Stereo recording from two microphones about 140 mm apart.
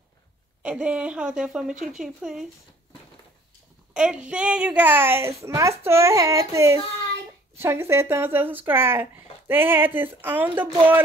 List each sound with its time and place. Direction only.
0.6 s speech: 5° right (ahead or behind)
3.9 s speech: 5° right (ahead or behind)